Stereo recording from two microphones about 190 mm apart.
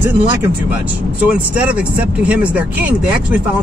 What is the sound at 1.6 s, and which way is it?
Speech, 5° right (ahead or behind).